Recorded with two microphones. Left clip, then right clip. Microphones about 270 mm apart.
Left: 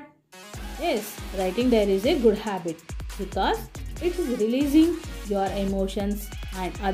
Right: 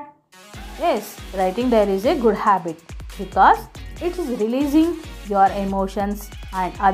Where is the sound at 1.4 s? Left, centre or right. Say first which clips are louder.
Right 5 dB; right.